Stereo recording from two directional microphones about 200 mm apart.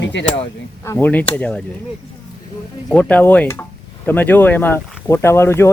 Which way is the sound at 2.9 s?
5° left (ahead or behind).